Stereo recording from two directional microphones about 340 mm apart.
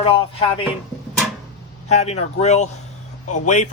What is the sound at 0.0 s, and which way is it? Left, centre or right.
Speech, centre.